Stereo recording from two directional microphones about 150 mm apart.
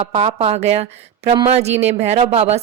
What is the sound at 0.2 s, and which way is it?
Speech, 45° right (ahead or behind).